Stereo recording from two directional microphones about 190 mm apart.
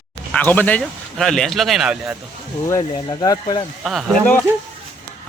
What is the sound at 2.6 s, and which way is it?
Speech, 20° left (ahead or behind).